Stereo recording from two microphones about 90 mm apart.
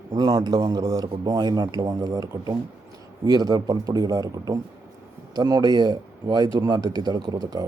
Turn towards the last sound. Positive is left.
turn(degrees=-45)  # may be behind; listen again after turning